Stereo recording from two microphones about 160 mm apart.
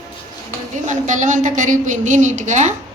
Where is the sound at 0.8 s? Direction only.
50° right (ahead or behind).